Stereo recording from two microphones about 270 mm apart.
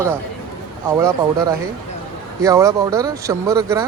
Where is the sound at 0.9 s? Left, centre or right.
Centre.